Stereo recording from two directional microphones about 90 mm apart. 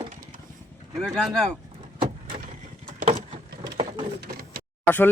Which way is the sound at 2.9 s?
90° right.